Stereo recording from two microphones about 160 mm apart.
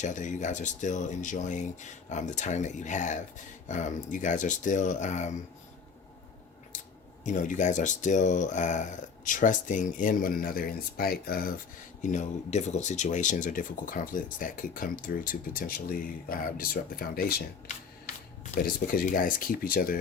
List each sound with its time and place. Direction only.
0.0 s speech: 50° left (ahead or behind)
6.7 s scissors: 50° left (ahead or behind)
7.3 s speech: 50° left (ahead or behind); by 11.5 s 70° left (ahead or behind)
12.0 s speech: 50° left (ahead or behind); by 17.4 s 70° left (ahead or behind)
18.6 s speech: 65° left (ahead or behind)